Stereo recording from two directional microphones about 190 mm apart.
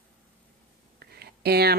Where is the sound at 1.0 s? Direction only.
55° right (ahead or behind).